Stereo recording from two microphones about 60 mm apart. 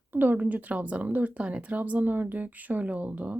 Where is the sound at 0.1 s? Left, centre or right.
Right.